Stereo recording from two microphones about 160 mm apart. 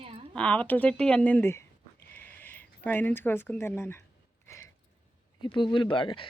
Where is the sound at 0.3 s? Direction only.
10° left (ahead or behind).